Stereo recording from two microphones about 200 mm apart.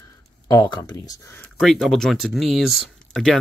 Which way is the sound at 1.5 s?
Centre (ahead or behind).